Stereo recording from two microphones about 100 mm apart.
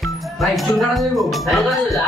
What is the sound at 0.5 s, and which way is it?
Speech, centre (ahead or behind).